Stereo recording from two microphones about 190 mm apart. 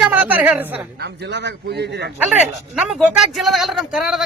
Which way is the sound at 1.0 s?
65° right (ahead or behind).